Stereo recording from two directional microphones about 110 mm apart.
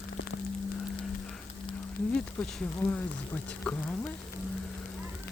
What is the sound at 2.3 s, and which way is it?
Speech, 15° left (ahead or behind).